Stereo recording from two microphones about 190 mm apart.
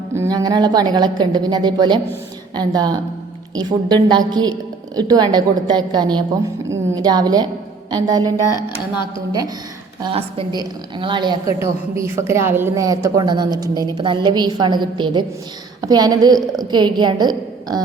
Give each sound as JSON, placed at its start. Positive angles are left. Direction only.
{"t": 0.1, "sound": "a woman's voice", "side_deg": -15}
{"t": 10.0, "sound": "a woman's voice", "side_deg": -30}